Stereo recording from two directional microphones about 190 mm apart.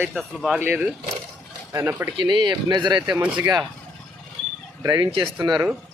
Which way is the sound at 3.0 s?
10° right (ahead or behind).